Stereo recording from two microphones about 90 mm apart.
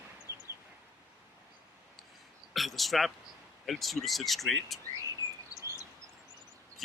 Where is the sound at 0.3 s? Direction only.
35° left (ahead or behind).